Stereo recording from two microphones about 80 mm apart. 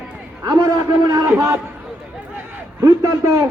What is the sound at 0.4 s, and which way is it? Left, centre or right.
A man's voice, right.